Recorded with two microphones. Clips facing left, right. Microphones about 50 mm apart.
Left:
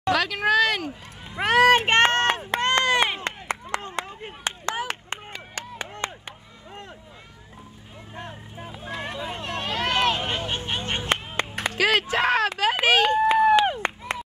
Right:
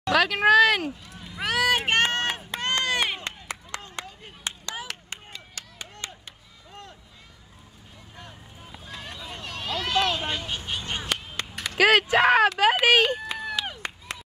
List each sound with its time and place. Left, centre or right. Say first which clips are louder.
0.1 s a sound: right 3 dB; centre
1.2 s run: left 7 dB; left
4.0 s a sound: left 6 dB; left
4.6 s chop: left 7 dB; left
6.7 s run: left 3 dB; left
8.1 s vehicle: left 8 dB; left
11.8 s speech: right 3 dB; centre
13.2 s run: left 14 dB; left